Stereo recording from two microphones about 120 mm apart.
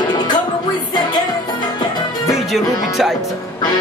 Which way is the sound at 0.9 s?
40° left (ahead or behind).